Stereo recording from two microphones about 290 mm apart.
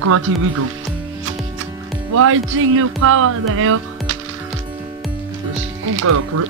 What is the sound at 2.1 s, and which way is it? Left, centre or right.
Speech, right.